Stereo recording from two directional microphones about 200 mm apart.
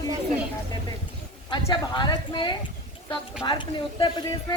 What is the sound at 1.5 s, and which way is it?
A woman's voice, 20° left (ahead or behind).